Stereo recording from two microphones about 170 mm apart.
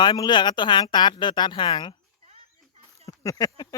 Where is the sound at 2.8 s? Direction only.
20° left (ahead or behind).